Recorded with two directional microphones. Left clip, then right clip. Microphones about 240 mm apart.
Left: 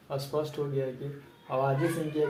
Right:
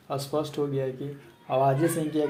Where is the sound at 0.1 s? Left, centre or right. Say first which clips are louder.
Right 3 dB; right.